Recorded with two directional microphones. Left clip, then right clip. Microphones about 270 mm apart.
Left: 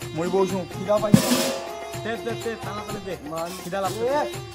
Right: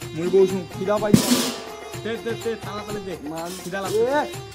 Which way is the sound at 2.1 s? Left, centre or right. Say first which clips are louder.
Right 3 dB; centre.